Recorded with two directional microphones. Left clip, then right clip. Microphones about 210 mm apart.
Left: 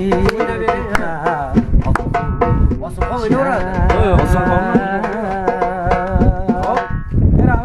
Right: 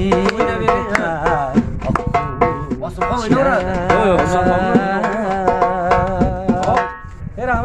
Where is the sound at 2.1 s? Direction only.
20° left (ahead or behind).